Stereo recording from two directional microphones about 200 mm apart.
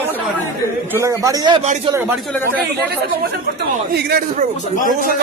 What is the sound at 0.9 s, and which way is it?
Speech, 15° right (ahead or behind).